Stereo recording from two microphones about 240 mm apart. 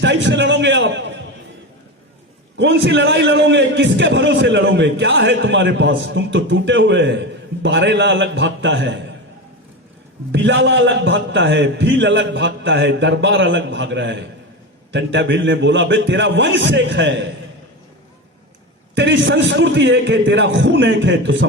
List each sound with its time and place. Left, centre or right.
0.0 s a man's voice: right
2.6 s a man's voice: right
10.3 s a man's voice: right
18.9 s a man's voice: right